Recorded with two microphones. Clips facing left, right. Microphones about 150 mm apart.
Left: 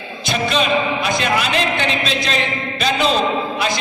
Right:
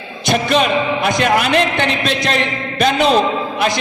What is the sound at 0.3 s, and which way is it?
A man's voice, 60° right (ahead or behind).